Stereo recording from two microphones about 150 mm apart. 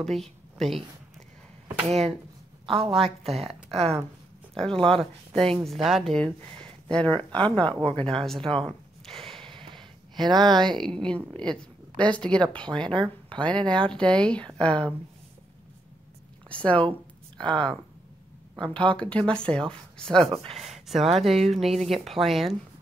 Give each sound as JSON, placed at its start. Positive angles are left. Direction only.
{"t": 0.0, "sound": "speech", "side_deg": 0}
{"t": 1.9, "sound": "a woman's voice", "side_deg": -45}
{"t": 4.8, "sound": "a woman's voice", "side_deg": 5}
{"t": 9.0, "sound": "a sound", "side_deg": 0}
{"t": 9.5, "sound": "a sound", "side_deg": -30}
{"t": 10.5, "sound": "a woman's voice", "side_deg": 5}
{"t": 16.4, "sound": "a woman's voice", "side_deg": 10}
{"t": 17.4, "sound": "speech", "side_deg": -30}
{"t": 18.6, "sound": "a woman's voice", "side_deg": 10}